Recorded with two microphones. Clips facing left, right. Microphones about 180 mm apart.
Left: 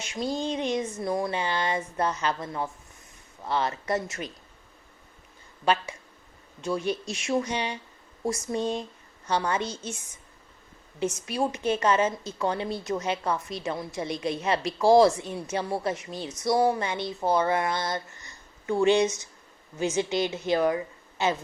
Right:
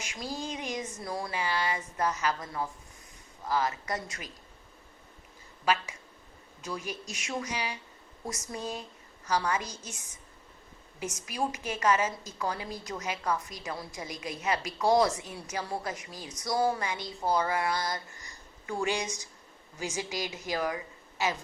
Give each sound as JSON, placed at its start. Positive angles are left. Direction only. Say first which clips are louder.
{"t": 0.0, "sound": "a woman's voice", "louder": "left 7 dB", "side_deg": 25}
{"t": 5.6, "sound": "a woman's voice", "louder": "left 4 dB", "side_deg": 30}
{"t": 11.0, "sound": "a woman's voice", "louder": "left 6 dB", "side_deg": 30}